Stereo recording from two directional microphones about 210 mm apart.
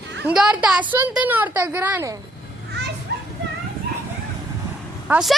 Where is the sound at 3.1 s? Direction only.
50° right (ahead or behind).